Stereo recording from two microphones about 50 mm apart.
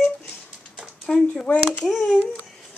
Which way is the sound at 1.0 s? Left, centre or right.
Centre.